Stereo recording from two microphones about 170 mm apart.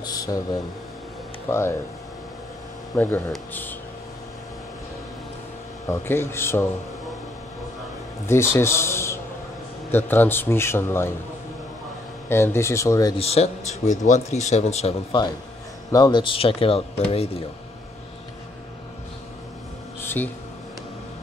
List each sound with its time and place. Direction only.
0.0 s a sound: 20° left (ahead or behind)
1.5 s a man's voice: 15° left (ahead or behind)
3.0 s a man's voice: 10° left (ahead or behind)
5.9 s a man's voice: 15° left (ahead or behind)
8.3 s a man's voice: 15° left (ahead or behind)
12.3 s a man's voice: 15° left (ahead or behind)
13.2 s speech: 35° left (ahead or behind)
15.9 s speech: 25° left (ahead or behind)
20.0 s a sound: 15° left (ahead or behind)